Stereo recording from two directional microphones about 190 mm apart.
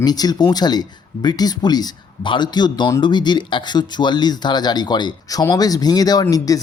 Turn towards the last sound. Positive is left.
turn(degrees=20)  # may be behind; listen again after turning